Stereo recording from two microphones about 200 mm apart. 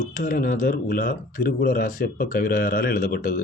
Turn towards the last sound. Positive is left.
turn(degrees=45)  # may be behind; listen again after turning